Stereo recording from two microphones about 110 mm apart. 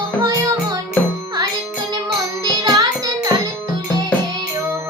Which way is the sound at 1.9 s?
35° right (ahead or behind).